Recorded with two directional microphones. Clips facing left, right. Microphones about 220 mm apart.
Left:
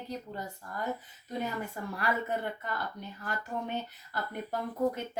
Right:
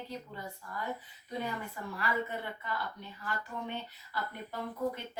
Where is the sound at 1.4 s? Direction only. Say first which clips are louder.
Left 3 dB; 45° left (ahead or behind).